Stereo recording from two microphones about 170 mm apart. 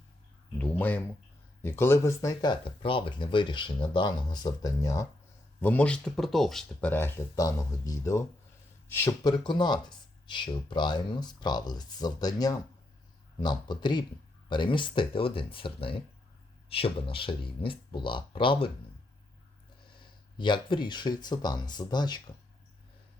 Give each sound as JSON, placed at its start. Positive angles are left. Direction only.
{"t": 0.6, "sound": "speech", "side_deg": 10}
{"t": 5.5, "sound": "speech", "side_deg": 10}
{"t": 20.0, "sound": "speech", "side_deg": 30}